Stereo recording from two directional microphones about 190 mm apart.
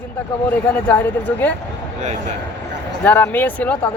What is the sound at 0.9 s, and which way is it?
Speech, 10° left (ahead or behind).